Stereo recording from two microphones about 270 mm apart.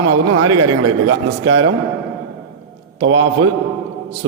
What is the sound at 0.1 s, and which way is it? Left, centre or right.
A man's voice, right.